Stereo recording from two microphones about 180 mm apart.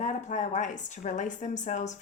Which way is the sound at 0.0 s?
40° left (ahead or behind).